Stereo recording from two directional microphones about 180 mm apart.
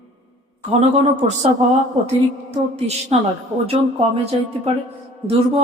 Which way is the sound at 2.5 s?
35° right (ahead or behind).